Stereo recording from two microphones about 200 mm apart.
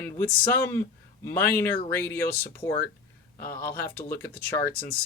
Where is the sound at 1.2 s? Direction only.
10° left (ahead or behind).